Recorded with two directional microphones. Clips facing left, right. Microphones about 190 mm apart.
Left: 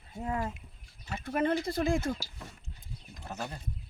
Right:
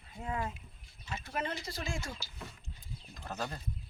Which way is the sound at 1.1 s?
50° left (ahead or behind).